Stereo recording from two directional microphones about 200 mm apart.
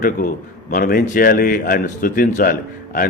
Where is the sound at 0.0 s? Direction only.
40° left (ahead or behind).